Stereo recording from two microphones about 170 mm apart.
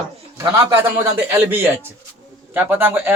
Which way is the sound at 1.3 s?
15° right (ahead or behind).